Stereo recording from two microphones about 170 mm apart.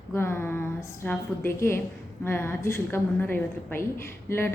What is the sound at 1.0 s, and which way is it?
A woman's voice, 10° left (ahead or behind).